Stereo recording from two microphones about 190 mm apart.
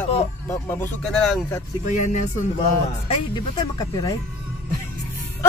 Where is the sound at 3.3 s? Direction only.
20° left (ahead or behind).